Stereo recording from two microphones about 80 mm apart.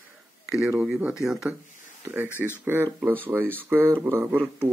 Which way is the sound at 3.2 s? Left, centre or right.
Right.